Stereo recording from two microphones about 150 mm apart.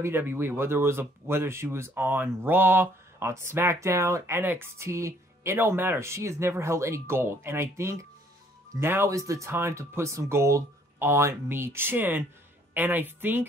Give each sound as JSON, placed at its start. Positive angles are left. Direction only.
{"t": 0.0, "sound": "speech", "side_deg": -15}